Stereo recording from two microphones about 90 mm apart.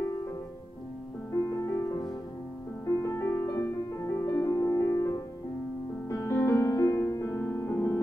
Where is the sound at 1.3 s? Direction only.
30° left (ahead or behind).